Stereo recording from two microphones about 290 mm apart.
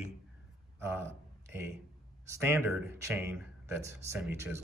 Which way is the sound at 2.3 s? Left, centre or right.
Centre.